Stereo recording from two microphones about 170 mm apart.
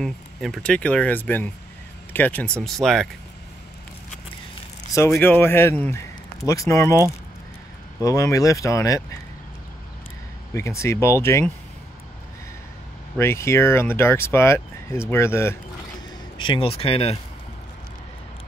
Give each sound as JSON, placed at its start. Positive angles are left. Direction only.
{"t": 0.0, "sound": "speech", "side_deg": 0}
{"t": 5.1, "sound": "speech", "side_deg": 10}
{"t": 8.0, "sound": "speech", "side_deg": 20}
{"t": 10.5, "sound": "speech", "side_deg": 15}
{"t": 13.2, "sound": "speech", "side_deg": 15}
{"t": 16.3, "sound": "speech", "side_deg": 30}